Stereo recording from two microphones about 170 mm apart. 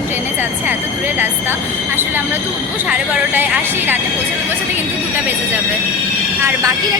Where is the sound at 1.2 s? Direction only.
10° right (ahead or behind).